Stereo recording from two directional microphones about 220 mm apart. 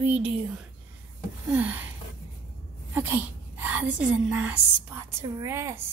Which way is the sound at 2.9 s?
10° right (ahead or behind).